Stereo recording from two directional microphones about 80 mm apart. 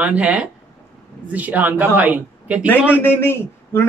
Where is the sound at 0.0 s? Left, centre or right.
Centre.